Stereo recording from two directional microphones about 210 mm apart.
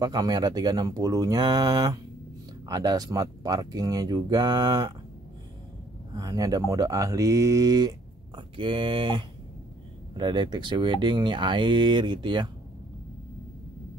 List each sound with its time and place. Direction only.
0.0 s speech: 20° right (ahead or behind)
6.1 s speech: 15° right (ahead or behind)